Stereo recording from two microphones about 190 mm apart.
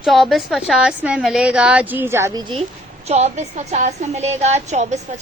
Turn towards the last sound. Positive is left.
turn(degrees=-35)  # may be behind; listen again after turning